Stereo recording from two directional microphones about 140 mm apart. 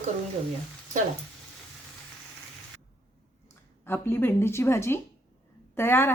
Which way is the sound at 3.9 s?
15° left (ahead or behind).